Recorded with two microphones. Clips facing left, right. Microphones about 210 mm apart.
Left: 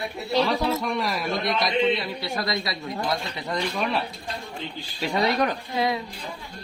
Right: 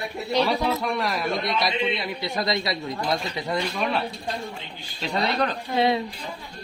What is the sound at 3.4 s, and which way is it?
Speech, 5° right (ahead or behind).